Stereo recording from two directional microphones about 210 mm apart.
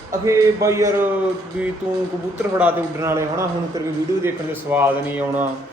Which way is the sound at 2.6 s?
10° right (ahead or behind).